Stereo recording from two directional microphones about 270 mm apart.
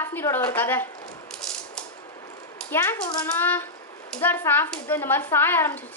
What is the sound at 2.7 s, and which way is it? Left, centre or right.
A child's voice, centre.